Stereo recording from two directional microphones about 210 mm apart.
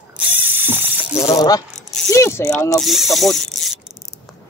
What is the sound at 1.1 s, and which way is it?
Coin, 30° left (ahead or behind).